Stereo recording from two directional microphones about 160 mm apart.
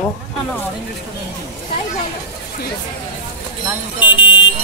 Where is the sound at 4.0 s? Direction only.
30° left (ahead or behind).